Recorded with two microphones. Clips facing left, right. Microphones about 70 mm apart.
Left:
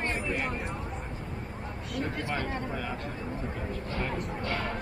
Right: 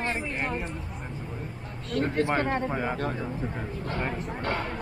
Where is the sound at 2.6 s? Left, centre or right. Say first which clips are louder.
Right 6 dB; right.